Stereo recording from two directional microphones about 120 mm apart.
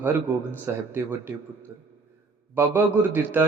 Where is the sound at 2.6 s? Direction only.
20° right (ahead or behind).